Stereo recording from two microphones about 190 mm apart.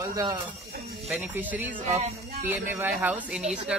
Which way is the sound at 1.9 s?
35° right (ahead or behind).